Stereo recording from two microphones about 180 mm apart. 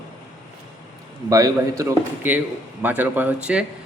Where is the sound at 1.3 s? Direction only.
15° right (ahead or behind).